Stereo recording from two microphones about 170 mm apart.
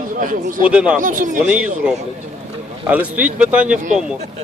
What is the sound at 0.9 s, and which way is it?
Speech, 50° right (ahead or behind).